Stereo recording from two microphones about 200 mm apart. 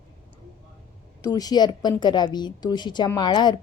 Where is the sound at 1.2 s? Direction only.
20° left (ahead or behind).